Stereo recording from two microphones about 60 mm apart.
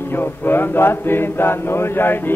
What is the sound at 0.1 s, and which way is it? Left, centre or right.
Music, left.